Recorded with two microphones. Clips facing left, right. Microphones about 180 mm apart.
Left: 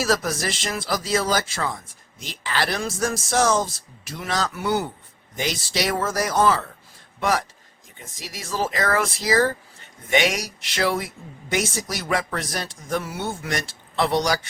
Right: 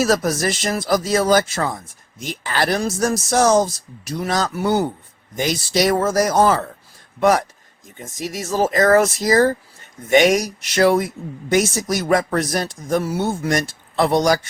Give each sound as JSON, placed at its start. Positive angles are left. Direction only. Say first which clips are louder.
{"t": 0.0, "sound": "speech", "louder": "right 5 dB", "side_deg": -45}